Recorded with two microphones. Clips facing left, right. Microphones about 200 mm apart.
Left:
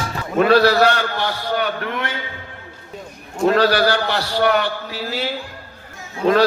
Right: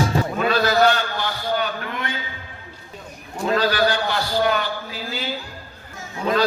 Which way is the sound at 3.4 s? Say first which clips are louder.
Left 4 dB; 70° left (ahead or behind).